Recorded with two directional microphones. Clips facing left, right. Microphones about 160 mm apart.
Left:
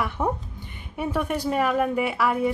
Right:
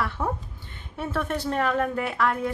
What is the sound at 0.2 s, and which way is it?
A woman's voice, 20° left (ahead or behind).